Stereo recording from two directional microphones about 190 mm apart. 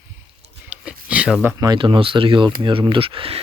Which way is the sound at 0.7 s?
5° right (ahead or behind).